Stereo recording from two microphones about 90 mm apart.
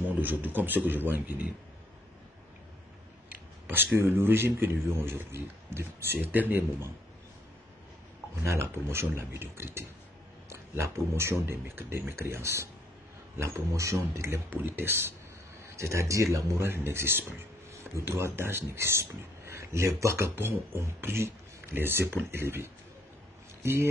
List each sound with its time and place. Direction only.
0.1 s speech: 20° right (ahead or behind)
3.3 s speech: 25° right (ahead or behind)
8.4 s speech: 30° right (ahead or behind)